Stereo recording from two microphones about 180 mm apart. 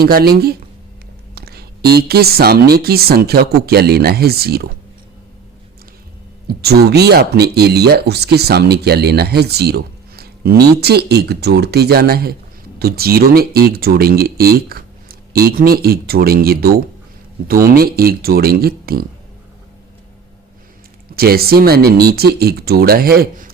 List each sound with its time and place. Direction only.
0.0 s speech: 55° right (ahead or behind)
6.5 s speech: 60° right (ahead or behind)
17.7 s speech: 55° right (ahead or behind)
21.2 s speech: 60° right (ahead or behind)